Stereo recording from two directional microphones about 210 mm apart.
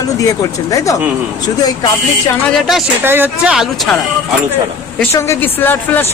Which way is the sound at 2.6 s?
Centre (ahead or behind).